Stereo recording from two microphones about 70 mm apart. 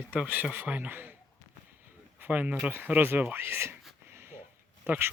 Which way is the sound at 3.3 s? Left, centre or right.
Right.